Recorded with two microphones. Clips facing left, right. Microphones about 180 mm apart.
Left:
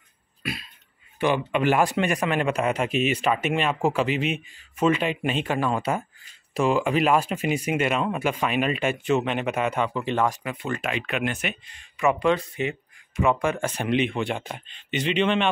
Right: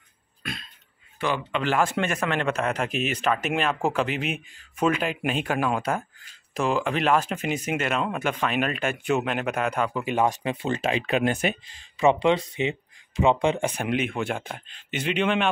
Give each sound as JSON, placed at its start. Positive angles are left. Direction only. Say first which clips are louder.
{"t": 0.4, "sound": "a sound", "louder": "left 3 dB", "side_deg": 5}
{"t": 1.2, "sound": "a man's voice", "louder": "left 4 dB", "side_deg": 15}
{"t": 10.4, "sound": "speech", "louder": "right 3 dB", "side_deg": -25}
{"t": 13.7, "sound": "a man's voice", "louder": "left 2 dB", "side_deg": -5}